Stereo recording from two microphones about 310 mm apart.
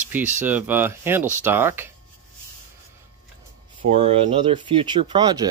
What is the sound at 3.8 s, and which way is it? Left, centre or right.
Speech, centre.